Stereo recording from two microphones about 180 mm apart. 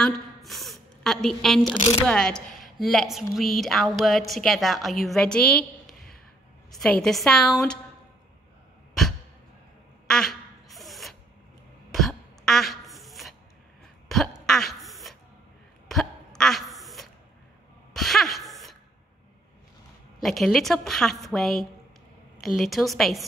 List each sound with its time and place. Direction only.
0.0 s a sound: centre (ahead or behind)
1.7 s speech: 35° left (ahead or behind)
2.0 s a woman's voice: 5° left (ahead or behind)
10.0 s quack: centre (ahead or behind)
11.9 s throat clearing: centre (ahead or behind)
14.0 s cough: centre (ahead or behind)
15.9 s hiccup: 5° left (ahead or behind)
17.9 s a sound: centre (ahead or behind)
20.2 s speech: centre (ahead or behind)